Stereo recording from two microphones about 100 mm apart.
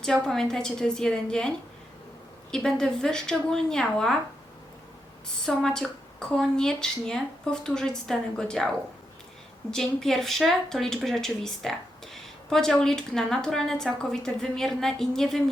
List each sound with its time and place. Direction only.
0.0 s a woman's voice: 5° left (ahead or behind)
2.6 s speech: 5° left (ahead or behind)
5.5 s speech: 5° left (ahead or behind)
9.7 s speech: 5° left (ahead or behind)